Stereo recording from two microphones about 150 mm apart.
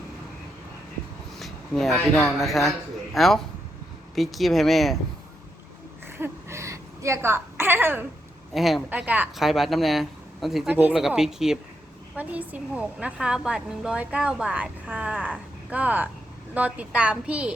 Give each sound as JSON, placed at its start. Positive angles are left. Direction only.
{"t": 1.4, "sound": "speech", "side_deg": 0}
{"t": 6.1, "sound": "a sound", "side_deg": -15}
{"t": 8.5, "sound": "speech", "side_deg": 0}
{"t": 8.9, "sound": "a woman's voice", "side_deg": -10}